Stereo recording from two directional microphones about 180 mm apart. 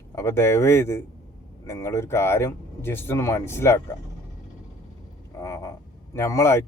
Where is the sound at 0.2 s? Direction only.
15° left (ahead or behind).